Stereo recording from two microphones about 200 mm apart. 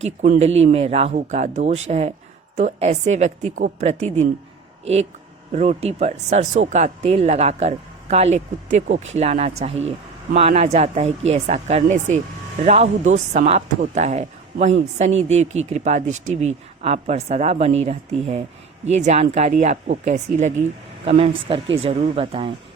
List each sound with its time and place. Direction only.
0.0 s speech: 35° right (ahead or behind)
5.5 s speech: 35° right (ahead or behind)